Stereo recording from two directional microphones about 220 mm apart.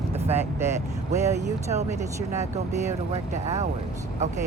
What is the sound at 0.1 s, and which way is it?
Vehicle, 30° right (ahead or behind).